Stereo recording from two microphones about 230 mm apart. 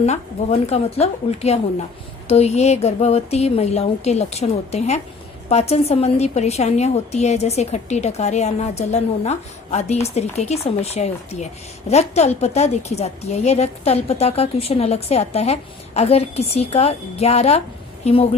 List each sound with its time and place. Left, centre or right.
0.7 s a woman's voice: left